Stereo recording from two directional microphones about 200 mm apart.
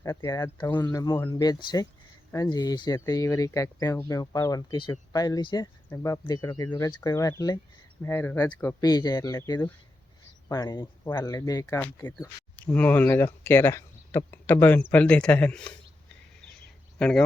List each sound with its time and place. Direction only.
0.0 s speech: 15° left (ahead or behind)
17.0 s speech: 5° left (ahead or behind)